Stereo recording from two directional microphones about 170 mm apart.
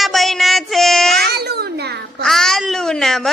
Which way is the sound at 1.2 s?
70° right (ahead or behind).